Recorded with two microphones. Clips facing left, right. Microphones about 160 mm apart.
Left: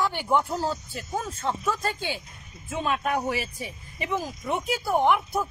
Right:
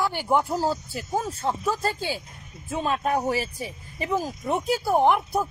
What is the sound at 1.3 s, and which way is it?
Speech, 35° right (ahead or behind).